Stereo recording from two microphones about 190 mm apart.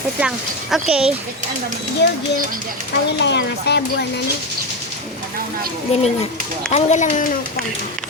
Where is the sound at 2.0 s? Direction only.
65° left (ahead or behind).